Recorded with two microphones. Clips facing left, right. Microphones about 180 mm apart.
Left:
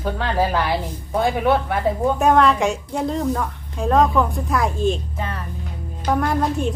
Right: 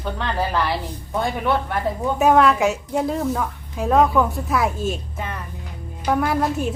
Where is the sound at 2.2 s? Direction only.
5° right (ahead or behind).